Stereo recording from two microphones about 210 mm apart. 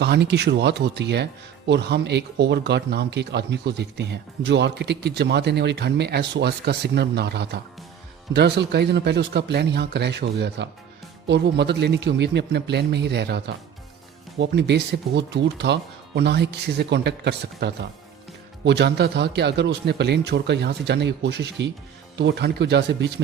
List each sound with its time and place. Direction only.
0.0 s speech: 50° right (ahead or behind)